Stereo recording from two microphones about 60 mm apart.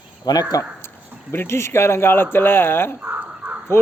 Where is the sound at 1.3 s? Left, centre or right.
Left.